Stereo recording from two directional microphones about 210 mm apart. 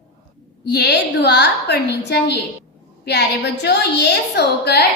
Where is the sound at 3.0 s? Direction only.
55° left (ahead or behind).